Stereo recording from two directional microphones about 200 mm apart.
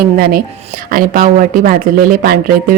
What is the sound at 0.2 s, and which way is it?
Speech, 45° right (ahead or behind).